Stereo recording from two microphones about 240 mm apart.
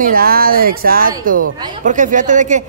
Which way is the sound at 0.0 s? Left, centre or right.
Right.